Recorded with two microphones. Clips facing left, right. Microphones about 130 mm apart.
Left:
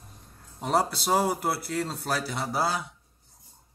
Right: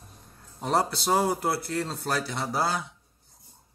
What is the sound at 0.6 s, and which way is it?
Speech, centre (ahead or behind).